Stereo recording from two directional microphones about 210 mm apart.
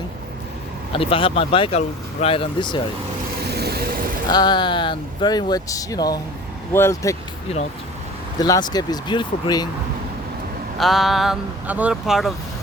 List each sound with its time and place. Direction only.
0.9 s speech: 25° left (ahead or behind)
3.5 s vehicle: 50° right (ahead or behind)
4.3 s speech: 20° left (ahead or behind)
8.4 s speech: 20° left (ahead or behind)
10.8 s speech: centre (ahead or behind)